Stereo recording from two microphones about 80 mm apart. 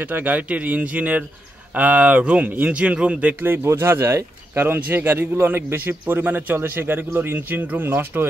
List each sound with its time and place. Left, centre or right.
0.1 s speech: right